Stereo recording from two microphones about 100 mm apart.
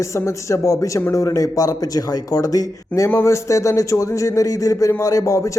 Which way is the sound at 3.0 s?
25° left (ahead or behind).